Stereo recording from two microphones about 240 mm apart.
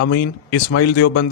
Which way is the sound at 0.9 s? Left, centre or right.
Left.